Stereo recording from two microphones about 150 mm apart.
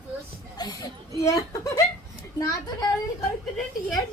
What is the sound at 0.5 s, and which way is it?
A child's voice, 25° left (ahead or behind).